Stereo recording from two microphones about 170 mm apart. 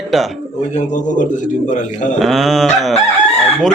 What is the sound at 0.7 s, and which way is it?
A man's voice, 45° left (ahead or behind).